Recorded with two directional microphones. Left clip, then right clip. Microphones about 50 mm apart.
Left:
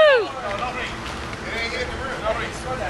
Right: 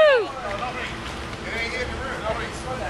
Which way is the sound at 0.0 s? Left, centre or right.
Centre.